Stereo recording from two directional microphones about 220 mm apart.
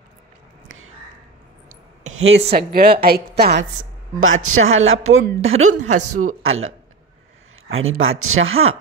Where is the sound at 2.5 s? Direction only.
45° right (ahead or behind).